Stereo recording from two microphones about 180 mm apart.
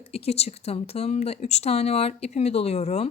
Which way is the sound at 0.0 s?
35° left (ahead or behind).